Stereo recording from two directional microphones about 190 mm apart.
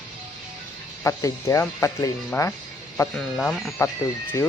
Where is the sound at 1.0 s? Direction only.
15° left (ahead or behind).